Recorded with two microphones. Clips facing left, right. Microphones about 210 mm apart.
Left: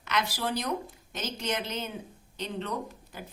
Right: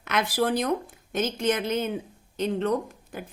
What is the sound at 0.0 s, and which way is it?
Speech, 55° right (ahead or behind).